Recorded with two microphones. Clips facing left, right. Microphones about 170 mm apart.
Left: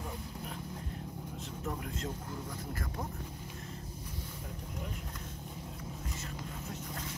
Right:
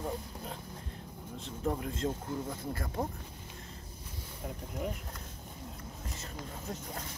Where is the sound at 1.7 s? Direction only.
30° right (ahead or behind).